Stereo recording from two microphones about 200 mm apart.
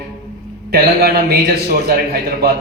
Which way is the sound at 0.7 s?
50° right (ahead or behind).